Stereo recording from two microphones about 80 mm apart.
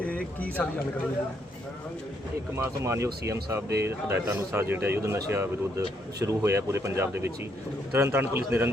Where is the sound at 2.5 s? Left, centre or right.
Right.